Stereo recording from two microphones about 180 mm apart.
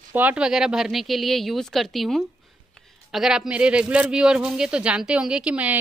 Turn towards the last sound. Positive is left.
turn(degrees=-10)  # may be behind; listen again after turning